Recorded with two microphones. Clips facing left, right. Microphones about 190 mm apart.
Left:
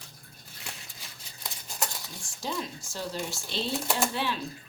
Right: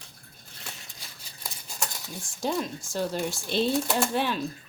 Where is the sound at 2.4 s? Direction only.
55° right (ahead or behind).